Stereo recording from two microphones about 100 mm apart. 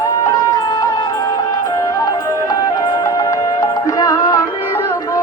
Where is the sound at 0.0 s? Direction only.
35° left (ahead or behind).